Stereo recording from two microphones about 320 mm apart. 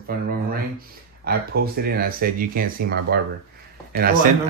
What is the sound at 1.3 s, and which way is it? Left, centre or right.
A man's voice, right.